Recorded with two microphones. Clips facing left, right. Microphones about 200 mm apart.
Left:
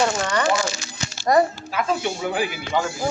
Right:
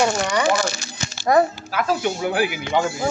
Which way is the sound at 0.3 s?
10° right (ahead or behind).